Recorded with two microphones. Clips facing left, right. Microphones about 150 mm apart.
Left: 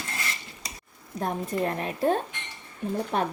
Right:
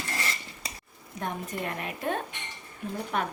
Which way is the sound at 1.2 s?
35° left (ahead or behind).